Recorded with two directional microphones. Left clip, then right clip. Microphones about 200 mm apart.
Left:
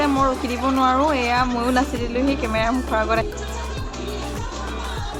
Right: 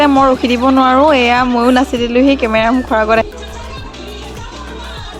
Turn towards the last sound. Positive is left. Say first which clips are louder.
# right 9 dB
turn(degrees=-40)  # may be behind; listen again after turning